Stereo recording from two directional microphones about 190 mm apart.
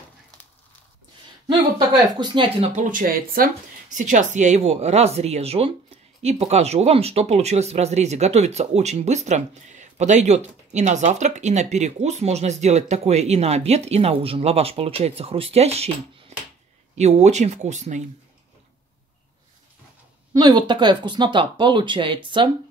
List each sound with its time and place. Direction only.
2.1 s speech: 25° right (ahead or behind)
2.7 s speech: 45° right (ahead or behind)
20.3 s speech: 20° right (ahead or behind)